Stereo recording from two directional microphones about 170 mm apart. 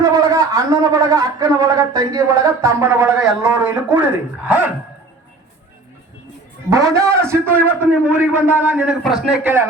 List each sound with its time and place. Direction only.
0.0 s a man's voice: 20° right (ahead or behind)
6.7 s a man's voice: 20° right (ahead or behind)